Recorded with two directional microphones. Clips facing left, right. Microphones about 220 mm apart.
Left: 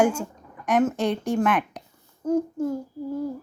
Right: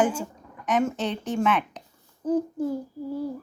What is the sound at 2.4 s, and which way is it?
Child singing, 15° right (ahead or behind).